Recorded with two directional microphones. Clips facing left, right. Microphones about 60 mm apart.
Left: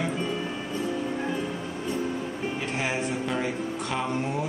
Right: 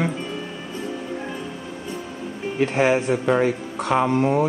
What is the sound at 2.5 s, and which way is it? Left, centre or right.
Speech, right.